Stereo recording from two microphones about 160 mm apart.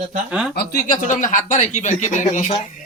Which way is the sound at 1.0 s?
50° left (ahead or behind).